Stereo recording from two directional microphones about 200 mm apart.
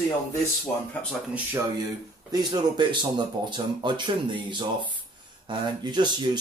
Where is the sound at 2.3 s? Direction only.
20° right (ahead or behind).